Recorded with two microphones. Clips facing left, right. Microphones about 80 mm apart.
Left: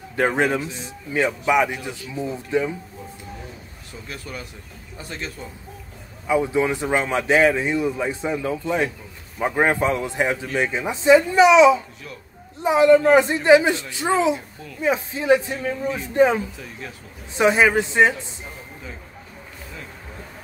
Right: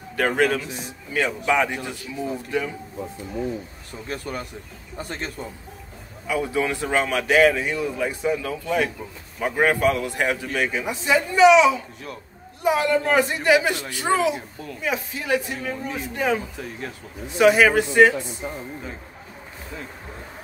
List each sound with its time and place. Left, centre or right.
0.1 s a man's voice: left
4.1 s speech: right
6.2 s a man's voice: left
17.4 s a man's voice: left